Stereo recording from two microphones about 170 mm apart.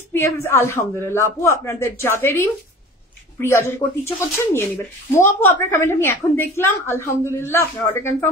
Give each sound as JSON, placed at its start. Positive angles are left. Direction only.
{"t": 0.1, "sound": "a woman's voice", "side_deg": 15}